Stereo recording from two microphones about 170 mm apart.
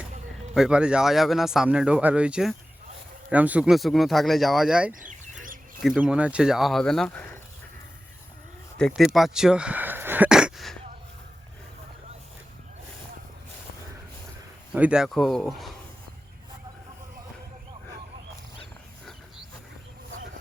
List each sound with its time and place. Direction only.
0.5 s speech: 5° right (ahead or behind)
4.9 s chicken: 50° right (ahead or behind)
5.8 s speech: 5° right (ahead or behind)
8.9 s a sound: centre (ahead or behind)
14.7 s speech: 5° right (ahead or behind)